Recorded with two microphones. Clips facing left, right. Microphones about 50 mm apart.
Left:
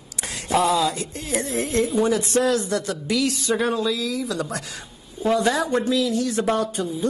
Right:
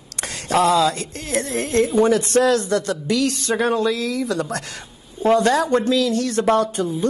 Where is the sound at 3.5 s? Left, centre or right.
Right.